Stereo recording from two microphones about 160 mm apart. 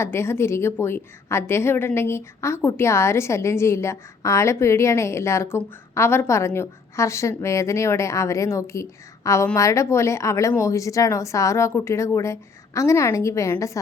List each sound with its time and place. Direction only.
0.0 s a woman's voice: 15° left (ahead or behind)